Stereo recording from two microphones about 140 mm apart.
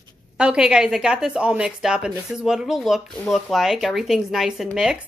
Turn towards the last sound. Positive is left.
turn(degrees=-5)  # may be behind; listen again after turning